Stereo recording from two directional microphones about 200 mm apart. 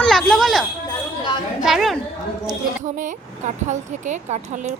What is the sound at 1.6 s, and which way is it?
Speech, centre (ahead or behind).